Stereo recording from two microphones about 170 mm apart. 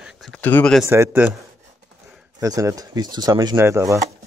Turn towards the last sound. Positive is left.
turn(degrees=-15)  # may be behind; listen again after turning